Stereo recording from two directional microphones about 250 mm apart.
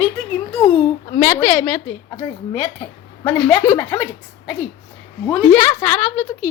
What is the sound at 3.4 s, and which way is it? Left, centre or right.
Speech, centre.